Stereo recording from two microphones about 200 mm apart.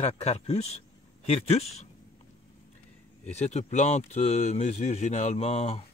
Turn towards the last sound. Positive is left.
turn(degrees=30)  # may be behind; listen again after turning